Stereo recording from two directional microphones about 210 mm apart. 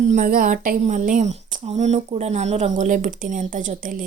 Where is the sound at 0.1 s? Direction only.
40° right (ahead or behind).